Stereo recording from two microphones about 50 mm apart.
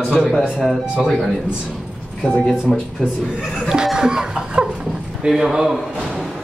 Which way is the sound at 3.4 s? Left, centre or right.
Centre.